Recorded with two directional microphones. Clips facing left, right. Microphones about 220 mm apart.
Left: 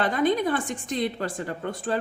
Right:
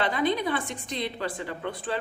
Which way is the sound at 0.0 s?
45° left (ahead or behind).